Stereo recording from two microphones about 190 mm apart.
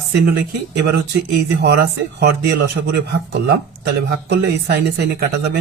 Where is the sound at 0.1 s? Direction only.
65° right (ahead or behind).